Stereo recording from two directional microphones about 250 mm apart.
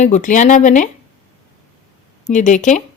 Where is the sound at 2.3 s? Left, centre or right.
Left.